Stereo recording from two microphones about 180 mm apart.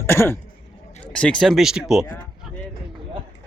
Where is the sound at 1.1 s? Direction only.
5° left (ahead or behind).